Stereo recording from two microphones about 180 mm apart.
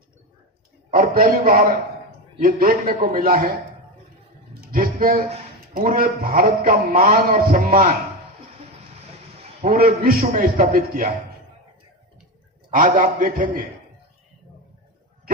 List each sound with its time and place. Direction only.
0.9 s a man's voice: 50° right (ahead or behind)
4.6 s a sound: 50° right (ahead or behind)
5.7 s a man's voice: 55° right (ahead or behind)
9.6 s a man's voice: 50° right (ahead or behind)
12.7 s a man's voice: 45° right (ahead or behind)